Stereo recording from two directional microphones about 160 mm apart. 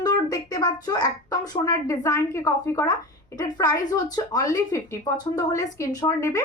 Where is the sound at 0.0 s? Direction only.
25° left (ahead or behind).